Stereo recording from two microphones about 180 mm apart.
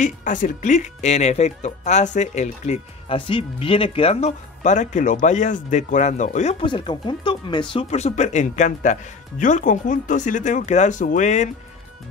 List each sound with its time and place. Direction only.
0.0 s speech: 45° left (ahead or behind)
6.6 s speech: 25° left (ahead or behind); by 11.5 s 40° left (ahead or behind)